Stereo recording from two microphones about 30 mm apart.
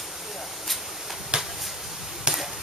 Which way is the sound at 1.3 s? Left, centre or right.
Right.